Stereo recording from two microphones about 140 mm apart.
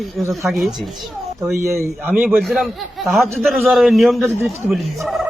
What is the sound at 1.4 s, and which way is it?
Speech, 20° right (ahead or behind).